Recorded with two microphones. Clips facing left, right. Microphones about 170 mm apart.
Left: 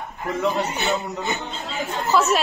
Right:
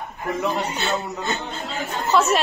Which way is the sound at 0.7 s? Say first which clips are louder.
Left 1 dB; 15° left (ahead or behind).